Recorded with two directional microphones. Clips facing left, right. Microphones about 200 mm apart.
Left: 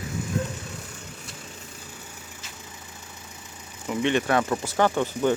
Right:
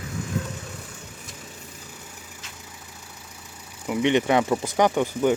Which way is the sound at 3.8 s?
15° right (ahead or behind).